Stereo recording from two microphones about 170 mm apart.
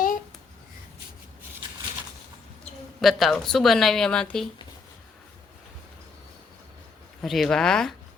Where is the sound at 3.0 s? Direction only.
Centre (ahead or behind).